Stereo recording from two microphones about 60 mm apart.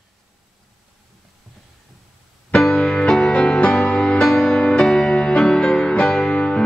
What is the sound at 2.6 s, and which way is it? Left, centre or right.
Music, centre.